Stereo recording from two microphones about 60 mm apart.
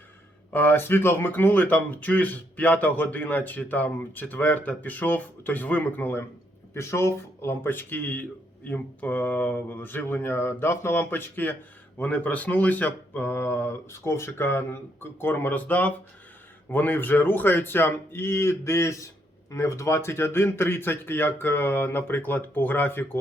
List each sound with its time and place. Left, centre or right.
0.5 s a man's voice: left
6.7 s a man's voice: left